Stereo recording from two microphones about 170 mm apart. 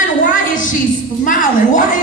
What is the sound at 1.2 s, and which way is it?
Speech, 50° left (ahead or behind).